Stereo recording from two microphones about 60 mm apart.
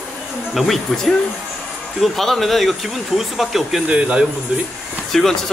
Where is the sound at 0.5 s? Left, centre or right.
Centre.